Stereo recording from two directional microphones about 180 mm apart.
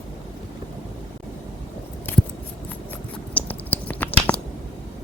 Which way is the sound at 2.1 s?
10° left (ahead or behind).